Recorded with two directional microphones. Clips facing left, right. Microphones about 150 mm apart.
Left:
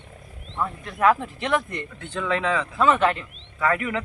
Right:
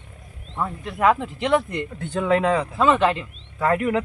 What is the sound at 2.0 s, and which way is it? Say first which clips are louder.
Speech: right 5 dB; 40° right (ahead or behind).